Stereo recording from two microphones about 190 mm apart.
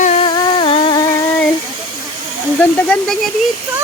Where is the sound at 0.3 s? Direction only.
25° left (ahead or behind).